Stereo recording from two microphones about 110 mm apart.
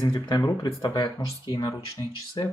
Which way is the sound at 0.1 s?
40° left (ahead or behind).